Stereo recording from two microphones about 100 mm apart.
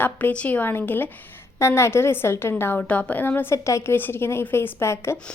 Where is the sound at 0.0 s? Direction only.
15° left (ahead or behind).